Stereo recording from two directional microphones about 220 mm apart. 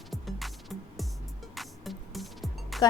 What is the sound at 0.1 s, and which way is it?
Music, centre (ahead or behind).